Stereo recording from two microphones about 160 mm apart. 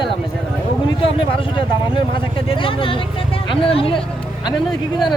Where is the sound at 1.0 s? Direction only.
35° left (ahead or behind).